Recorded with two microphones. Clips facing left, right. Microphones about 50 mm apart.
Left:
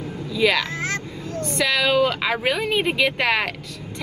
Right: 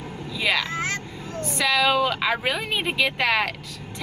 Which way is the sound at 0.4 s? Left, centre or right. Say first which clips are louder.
Left 4 dB; centre.